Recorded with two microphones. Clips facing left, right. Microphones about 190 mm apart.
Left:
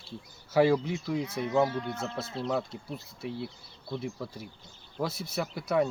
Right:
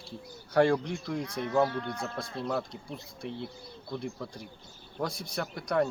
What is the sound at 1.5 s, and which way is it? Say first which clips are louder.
Speech: even; 20° left (ahead or behind).